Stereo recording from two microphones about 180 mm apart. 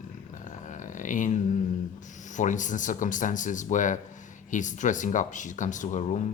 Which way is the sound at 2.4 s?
45° left (ahead or behind).